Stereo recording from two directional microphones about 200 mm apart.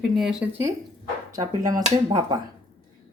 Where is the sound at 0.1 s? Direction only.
Centre (ahead or behind).